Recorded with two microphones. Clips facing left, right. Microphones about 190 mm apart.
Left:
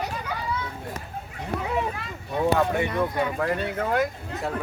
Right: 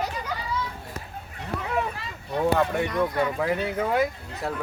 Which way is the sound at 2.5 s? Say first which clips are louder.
Even; 5° left (ahead or behind).